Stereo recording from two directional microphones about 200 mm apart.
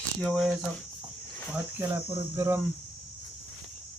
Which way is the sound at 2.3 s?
15° right (ahead or behind).